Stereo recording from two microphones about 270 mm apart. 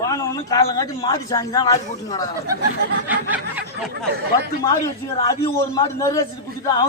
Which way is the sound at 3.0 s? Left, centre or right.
Centre.